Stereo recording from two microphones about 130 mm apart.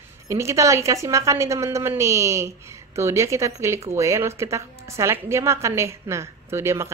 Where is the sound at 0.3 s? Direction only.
20° right (ahead or behind).